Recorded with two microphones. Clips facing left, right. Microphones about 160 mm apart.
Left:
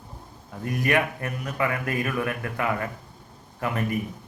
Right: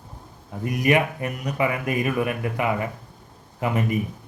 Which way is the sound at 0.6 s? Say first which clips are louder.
Right 3 dB; 15° right (ahead or behind).